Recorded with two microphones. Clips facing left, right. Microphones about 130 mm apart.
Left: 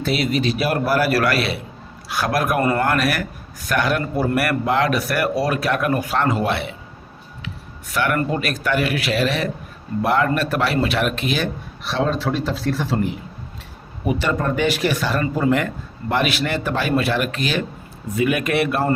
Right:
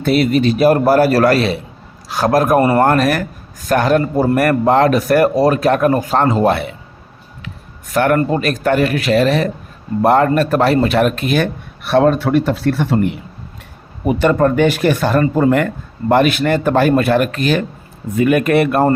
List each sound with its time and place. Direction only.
0.0 s a man's voice: 50° right (ahead or behind); by 2.8 s 30° right (ahead or behind)
2.8 s a man's voice: 40° right (ahead or behind)
7.9 s speech: 40° right (ahead or behind)